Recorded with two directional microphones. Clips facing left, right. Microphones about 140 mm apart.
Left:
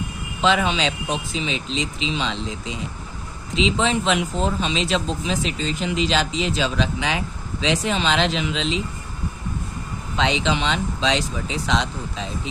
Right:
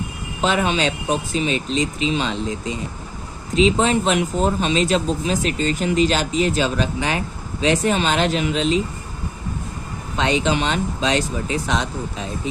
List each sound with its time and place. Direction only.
0.4 s speech: 50° right (ahead or behind)
10.2 s speech: 50° right (ahead or behind)